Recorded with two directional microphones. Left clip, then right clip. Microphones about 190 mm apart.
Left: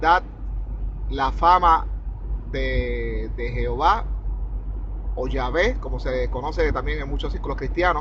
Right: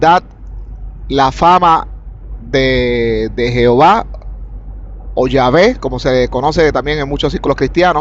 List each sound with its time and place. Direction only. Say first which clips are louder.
0.0 s speech: right 9 dB; 50° right (ahead or behind)
5.1 s speech: right 14 dB; 45° right (ahead or behind)